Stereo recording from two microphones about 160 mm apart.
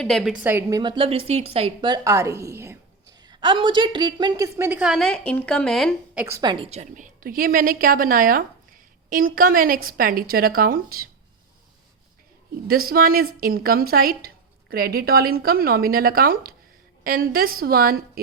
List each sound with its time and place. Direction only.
0.0 s a woman's voice: centre (ahead or behind)
0.8 s a woman's voice: 30° right (ahead or behind)
4.8 s a woman's voice: centre (ahead or behind)
6.1 s a woman's voice: 15° right (ahead or behind)
6.4 s a woman's voice: 30° right (ahead or behind)
6.7 s speech: 45° right (ahead or behind); by 11.1 s 65° right (ahead or behind)
12.6 s a woman's voice: 65° right (ahead or behind)